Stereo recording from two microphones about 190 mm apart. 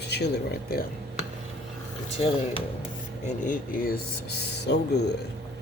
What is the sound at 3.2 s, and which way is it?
Speech, 45° left (ahead or behind).